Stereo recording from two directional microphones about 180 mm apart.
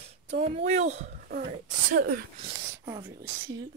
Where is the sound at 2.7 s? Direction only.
15° right (ahead or behind).